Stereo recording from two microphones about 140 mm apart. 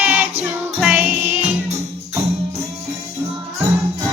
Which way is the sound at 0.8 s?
5° right (ahead or behind).